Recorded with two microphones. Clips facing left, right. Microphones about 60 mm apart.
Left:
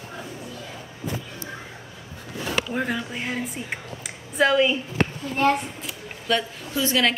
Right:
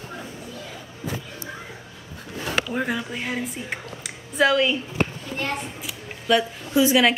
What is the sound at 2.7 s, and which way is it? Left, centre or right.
Speech, centre.